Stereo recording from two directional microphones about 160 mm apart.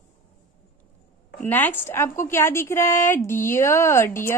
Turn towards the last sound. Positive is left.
turn(degrees=15)  # may be behind; listen again after turning